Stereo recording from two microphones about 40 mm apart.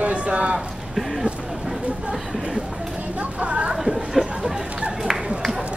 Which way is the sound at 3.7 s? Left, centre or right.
Centre.